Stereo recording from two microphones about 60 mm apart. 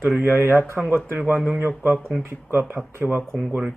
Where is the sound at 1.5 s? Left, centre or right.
Right.